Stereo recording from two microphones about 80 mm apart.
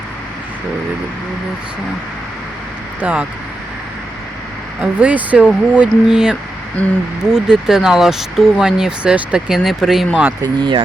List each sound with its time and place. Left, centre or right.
3.0 s speech: centre
4.8 s speech: centre
6.8 s speech: centre
7.3 s speech: centre
10.4 s speech: right